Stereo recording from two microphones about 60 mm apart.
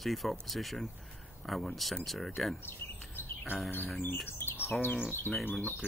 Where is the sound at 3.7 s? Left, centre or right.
Left.